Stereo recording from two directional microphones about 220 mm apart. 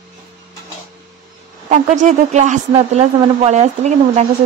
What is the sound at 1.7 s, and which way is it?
Speech, 35° right (ahead or behind).